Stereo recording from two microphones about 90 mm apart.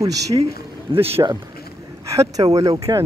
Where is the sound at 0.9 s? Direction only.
70° right (ahead or behind).